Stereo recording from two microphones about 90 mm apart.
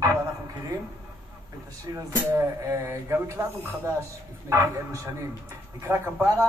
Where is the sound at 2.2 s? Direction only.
25° right (ahead or behind).